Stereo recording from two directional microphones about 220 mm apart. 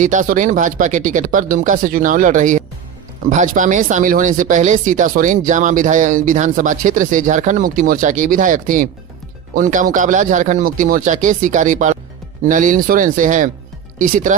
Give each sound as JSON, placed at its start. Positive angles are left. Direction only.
{"t": 0.0, "sound": "speech", "side_deg": -35}